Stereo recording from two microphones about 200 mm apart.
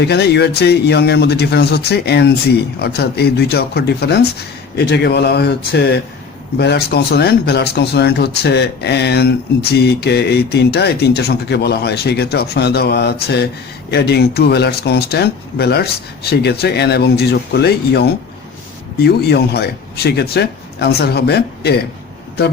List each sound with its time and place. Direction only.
0.0 s speech: 55° left (ahead or behind)